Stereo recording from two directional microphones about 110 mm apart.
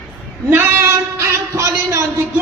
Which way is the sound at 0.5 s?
20° right (ahead or behind).